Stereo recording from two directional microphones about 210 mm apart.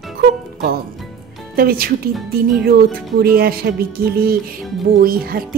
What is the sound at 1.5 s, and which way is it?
Speech, 45° right (ahead or behind).